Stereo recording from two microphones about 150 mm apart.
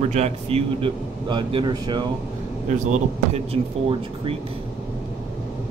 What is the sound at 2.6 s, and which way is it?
Speech, 50° right (ahead or behind).